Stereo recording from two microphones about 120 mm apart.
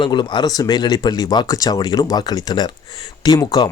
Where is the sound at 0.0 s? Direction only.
40° left (ahead or behind).